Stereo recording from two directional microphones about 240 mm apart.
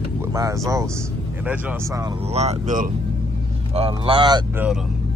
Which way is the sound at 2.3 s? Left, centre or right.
Right.